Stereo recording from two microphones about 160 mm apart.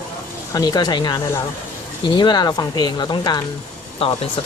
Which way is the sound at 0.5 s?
25° left (ahead or behind).